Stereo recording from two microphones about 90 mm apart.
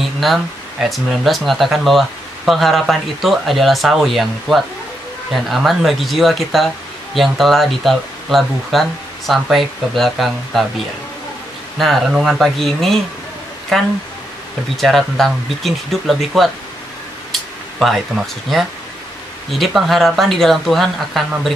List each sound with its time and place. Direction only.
0.0 s speech: centre (ahead or behind)
11.8 s speech: centre (ahead or behind)